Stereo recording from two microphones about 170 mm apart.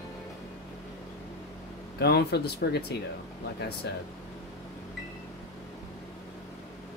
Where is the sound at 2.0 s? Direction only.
70° left (ahead or behind).